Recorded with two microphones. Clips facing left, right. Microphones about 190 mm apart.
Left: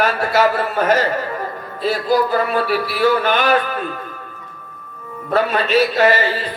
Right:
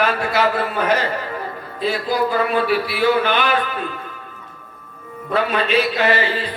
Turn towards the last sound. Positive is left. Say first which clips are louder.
# left 3 dB
turn(degrees=45)  # may be behind; listen again after turning